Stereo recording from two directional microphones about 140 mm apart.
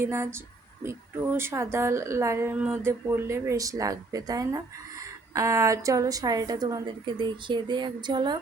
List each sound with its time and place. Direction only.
0.0 s a woman's voice: 20° right (ahead or behind)